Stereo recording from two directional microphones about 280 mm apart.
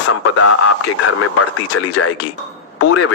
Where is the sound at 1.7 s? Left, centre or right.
Left.